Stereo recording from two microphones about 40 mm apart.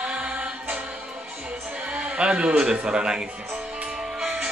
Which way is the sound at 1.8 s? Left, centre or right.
Right.